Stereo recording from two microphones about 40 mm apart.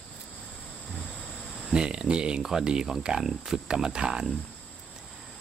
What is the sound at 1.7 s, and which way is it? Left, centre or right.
Speech, right.